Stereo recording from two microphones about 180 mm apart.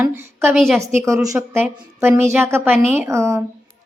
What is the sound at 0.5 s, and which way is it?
Speech, centre (ahead or behind).